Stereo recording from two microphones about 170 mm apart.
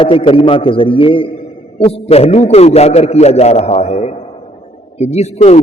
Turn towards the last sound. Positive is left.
turn(degrees=40)  # may be behind; listen again after turning